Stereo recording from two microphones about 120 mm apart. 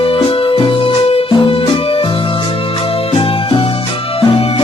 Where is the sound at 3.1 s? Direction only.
45° left (ahead or behind).